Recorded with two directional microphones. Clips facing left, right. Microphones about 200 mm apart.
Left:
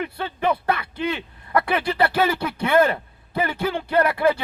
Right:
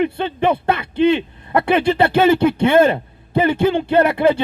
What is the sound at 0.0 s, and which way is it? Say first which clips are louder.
Speech: right 7 dB; 25° right (ahead or behind).